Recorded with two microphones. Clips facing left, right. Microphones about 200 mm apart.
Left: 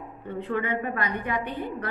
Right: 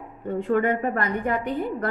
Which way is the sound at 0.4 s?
45° right (ahead or behind).